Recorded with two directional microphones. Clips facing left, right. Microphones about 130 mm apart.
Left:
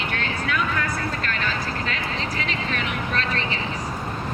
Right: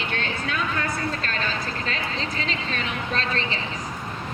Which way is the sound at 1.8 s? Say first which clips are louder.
Left 1 dB; 30° right (ahead or behind).